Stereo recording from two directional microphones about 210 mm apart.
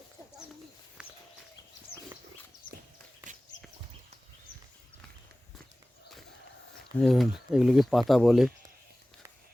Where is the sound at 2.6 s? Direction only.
40° left (ahead or behind).